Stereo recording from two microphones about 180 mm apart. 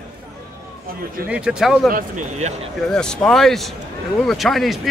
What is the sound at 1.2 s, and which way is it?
Speech, 5° right (ahead or behind).